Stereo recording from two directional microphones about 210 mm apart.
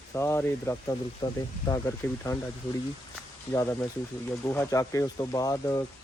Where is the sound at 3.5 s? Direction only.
15° left (ahead or behind).